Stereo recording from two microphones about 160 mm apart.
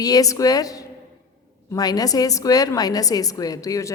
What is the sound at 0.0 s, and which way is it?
A woman's voice, 20° left (ahead or behind).